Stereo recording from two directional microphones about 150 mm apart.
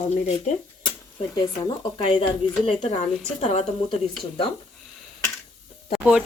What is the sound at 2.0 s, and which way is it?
Speech, 35° left (ahead or behind).